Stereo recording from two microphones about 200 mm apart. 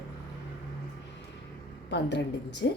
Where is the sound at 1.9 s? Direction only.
60° left (ahead or behind).